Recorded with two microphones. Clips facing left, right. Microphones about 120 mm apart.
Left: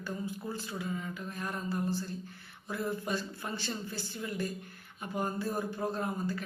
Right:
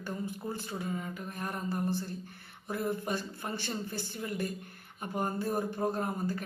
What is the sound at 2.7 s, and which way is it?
Speech, 20° right (ahead or behind).